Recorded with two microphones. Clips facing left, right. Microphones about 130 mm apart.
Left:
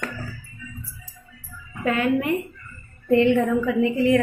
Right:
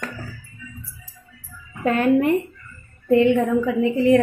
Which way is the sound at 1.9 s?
40° right (ahead or behind).